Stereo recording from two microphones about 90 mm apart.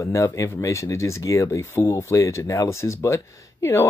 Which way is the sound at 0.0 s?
35° left (ahead or behind).